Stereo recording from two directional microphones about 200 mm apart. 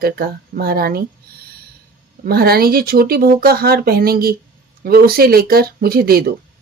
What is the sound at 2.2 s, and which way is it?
Speech, 50° right (ahead or behind).